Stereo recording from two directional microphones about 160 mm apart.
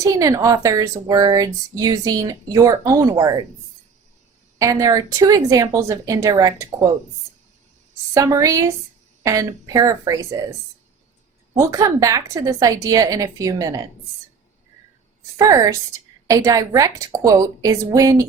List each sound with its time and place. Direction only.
0.0 s a woman's voice: 20° right (ahead or behind)
4.5 s a woman's voice: 20° right (ahead or behind)
8.1 s a woman's voice: 20° right (ahead or behind)
11.5 s a woman's voice: 20° right (ahead or behind)
15.4 s a woman's voice: 20° right (ahead or behind)